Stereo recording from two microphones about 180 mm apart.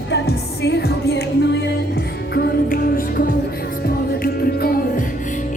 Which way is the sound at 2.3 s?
55° left (ahead or behind).